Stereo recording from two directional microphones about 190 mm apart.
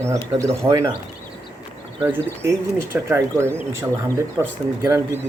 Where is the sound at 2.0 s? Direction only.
10° right (ahead or behind).